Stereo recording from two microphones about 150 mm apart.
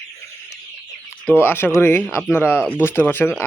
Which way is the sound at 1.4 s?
15° left (ahead or behind).